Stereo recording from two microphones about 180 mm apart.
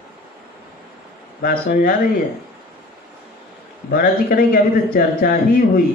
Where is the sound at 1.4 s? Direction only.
55° left (ahead or behind).